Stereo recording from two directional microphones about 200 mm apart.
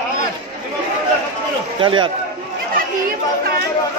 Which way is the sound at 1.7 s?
25° right (ahead or behind).